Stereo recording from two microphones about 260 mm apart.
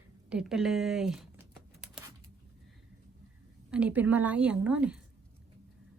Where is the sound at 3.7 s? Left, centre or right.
Centre.